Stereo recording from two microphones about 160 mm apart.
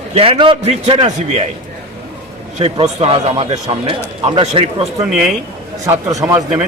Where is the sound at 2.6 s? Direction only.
35° right (ahead or behind).